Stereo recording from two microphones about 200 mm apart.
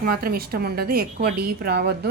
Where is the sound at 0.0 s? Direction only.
50° right (ahead or behind).